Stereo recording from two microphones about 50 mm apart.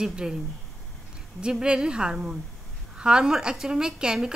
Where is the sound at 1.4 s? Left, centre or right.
Centre.